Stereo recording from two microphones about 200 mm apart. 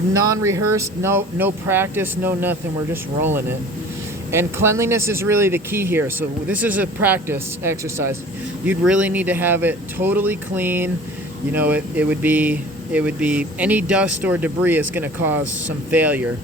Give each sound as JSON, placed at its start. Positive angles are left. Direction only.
{"t": 0.1, "sound": "speech", "side_deg": -15}